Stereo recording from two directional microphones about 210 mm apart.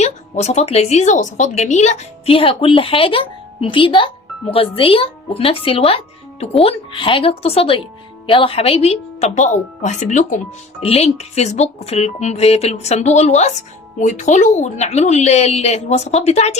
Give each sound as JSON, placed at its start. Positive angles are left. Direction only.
{"t": 0.0, "sound": "speech", "side_deg": 30}